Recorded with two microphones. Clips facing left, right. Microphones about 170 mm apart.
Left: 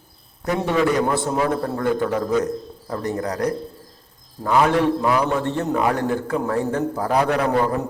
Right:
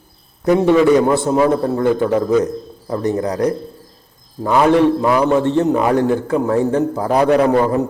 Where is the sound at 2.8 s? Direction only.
20° right (ahead or behind).